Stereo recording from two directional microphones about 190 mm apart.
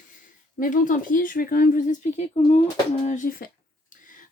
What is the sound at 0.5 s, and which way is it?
Speech, 45° left (ahead or behind).